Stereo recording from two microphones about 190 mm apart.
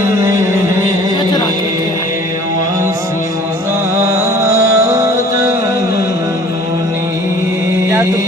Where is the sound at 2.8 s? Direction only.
15° right (ahead or behind).